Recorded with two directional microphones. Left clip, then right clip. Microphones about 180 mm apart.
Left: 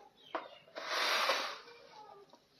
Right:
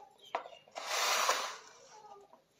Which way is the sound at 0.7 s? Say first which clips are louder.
Right 1 dB; 20° right (ahead or behind).